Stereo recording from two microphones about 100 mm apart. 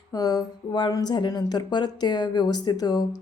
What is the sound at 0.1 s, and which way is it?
A woman's voice, 40° left (ahead or behind).